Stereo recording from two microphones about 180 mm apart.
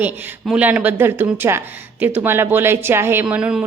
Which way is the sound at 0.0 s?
5° right (ahead or behind).